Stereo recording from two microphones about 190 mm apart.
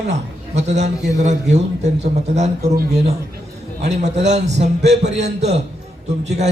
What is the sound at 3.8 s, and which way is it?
A man's voice, 35° right (ahead or behind).